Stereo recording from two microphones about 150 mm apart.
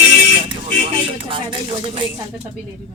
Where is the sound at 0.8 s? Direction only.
35° right (ahead or behind).